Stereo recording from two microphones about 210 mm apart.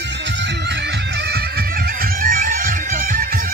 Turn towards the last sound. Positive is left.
turn(degrees=-45)  # may be behind; listen again after turning